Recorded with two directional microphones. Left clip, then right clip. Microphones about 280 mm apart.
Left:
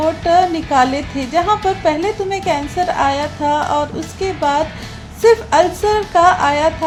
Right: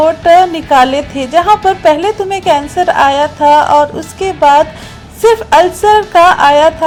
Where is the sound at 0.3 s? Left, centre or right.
Right.